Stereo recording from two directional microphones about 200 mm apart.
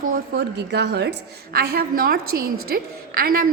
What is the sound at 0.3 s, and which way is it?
A woman's voice, 60° right (ahead or behind).